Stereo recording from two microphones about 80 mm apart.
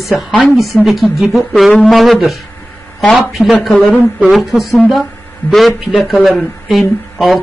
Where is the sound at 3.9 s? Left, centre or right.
Centre.